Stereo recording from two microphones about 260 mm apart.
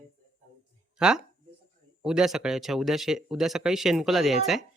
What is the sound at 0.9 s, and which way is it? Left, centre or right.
Speech, centre.